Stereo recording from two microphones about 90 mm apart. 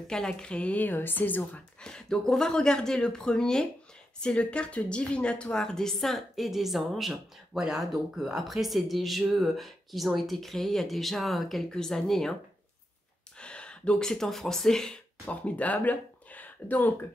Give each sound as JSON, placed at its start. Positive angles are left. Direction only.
{"t": 0.0, "sound": "speech", "side_deg": 5}
{"t": 1.8, "sound": "a woman's voice", "side_deg": 10}
{"t": 13.4, "sound": "speech", "side_deg": 10}